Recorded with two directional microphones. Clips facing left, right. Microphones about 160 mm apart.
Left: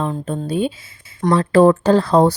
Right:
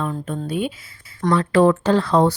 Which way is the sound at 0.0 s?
25° left (ahead or behind).